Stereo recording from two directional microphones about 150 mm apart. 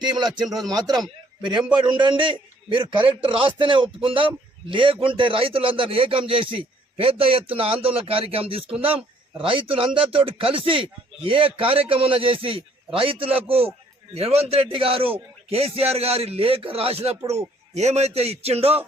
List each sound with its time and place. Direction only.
0.0 s a man's voice: 30° right (ahead or behind)